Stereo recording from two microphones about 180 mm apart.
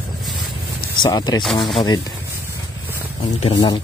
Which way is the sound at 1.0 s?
25° left (ahead or behind).